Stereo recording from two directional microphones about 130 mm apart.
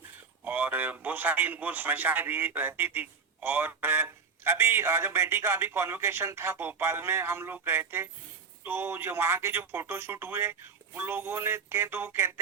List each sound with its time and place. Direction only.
0.4 s a man's voice: 15° right (ahead or behind)